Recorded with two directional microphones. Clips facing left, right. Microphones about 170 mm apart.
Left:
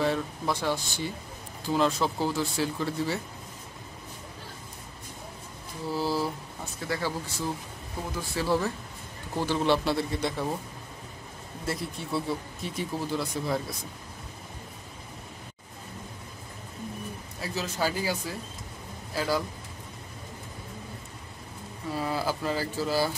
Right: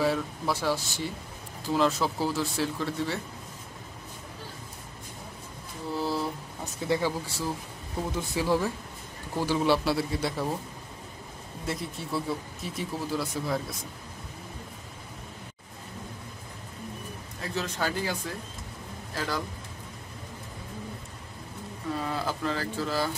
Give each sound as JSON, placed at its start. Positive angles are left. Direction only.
{"t": 0.0, "sound": "speech", "side_deg": -5}
{"t": 5.9, "sound": "speech", "side_deg": 0}
{"t": 6.6, "sound": "speech", "side_deg": -20}
{"t": 8.2, "sound": "speech", "side_deg": -15}
{"t": 11.6, "sound": "speech", "side_deg": 0}
{"t": 17.4, "sound": "speech", "side_deg": 5}
{"t": 21.9, "sound": "speech", "side_deg": 5}